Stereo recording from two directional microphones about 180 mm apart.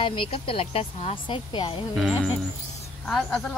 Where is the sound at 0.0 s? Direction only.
30° left (ahead or behind).